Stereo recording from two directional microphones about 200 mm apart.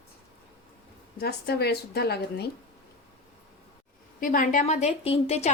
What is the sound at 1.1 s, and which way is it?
A woman's voice, 55° left (ahead or behind).